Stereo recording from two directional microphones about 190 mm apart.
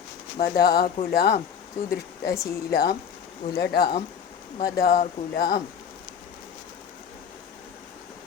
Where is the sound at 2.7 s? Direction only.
55° left (ahead or behind).